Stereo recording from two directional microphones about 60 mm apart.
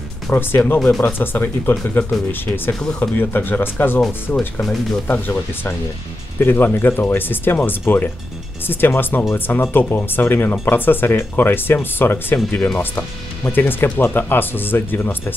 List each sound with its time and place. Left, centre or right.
0.3 s speech: left
4.3 s speech: left